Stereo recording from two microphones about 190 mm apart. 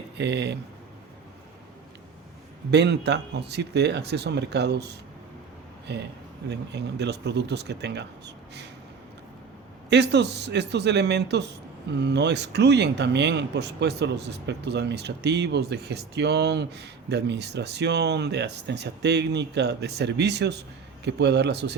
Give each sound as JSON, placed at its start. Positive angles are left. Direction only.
{"t": 0.2, "sound": "speech", "side_deg": -65}
{"t": 2.6, "sound": "speech", "side_deg": -65}
{"t": 9.9, "sound": "speech", "side_deg": -65}